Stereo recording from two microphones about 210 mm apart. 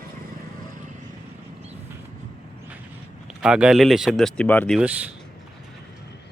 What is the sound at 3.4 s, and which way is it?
Speech, 5° right (ahead or behind).